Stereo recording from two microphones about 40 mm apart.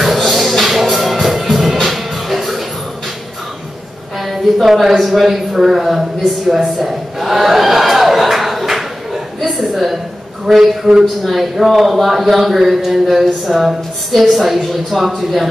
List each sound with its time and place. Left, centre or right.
0.0 s music: centre
4.2 s speech: centre
6.5 s a sound: centre
10.4 s speech: centre
13.5 s a woman's voice: centre